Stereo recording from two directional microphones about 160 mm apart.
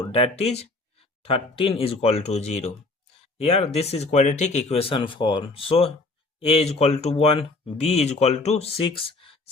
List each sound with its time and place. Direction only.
0.1 s speech: 40° left (ahead or behind)